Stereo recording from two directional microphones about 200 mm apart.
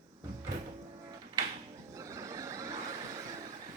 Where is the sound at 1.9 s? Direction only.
15° right (ahead or behind).